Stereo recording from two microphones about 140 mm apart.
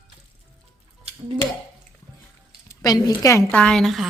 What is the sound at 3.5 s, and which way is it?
Speech, 5° left (ahead or behind).